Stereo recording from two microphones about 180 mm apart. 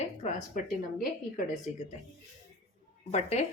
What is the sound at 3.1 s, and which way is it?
Speech, 40° left (ahead or behind).